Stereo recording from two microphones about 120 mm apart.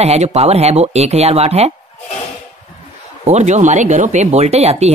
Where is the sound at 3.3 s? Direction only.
70° right (ahead or behind).